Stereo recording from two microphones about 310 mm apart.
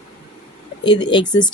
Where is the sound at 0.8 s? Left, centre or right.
Centre.